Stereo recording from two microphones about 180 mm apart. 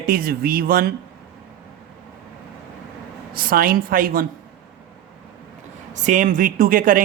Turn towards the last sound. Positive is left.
turn(degrees=-50)  # may be behind; listen again after turning